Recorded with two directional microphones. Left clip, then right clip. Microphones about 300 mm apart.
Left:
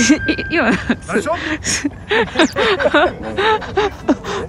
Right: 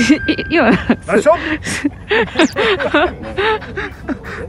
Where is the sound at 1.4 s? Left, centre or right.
Centre.